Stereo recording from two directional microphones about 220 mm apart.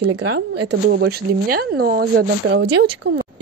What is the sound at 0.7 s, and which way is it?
Speech, 45° right (ahead or behind).